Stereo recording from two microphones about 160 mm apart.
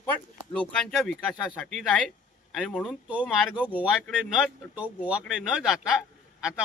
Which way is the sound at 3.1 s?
10° right (ahead or behind).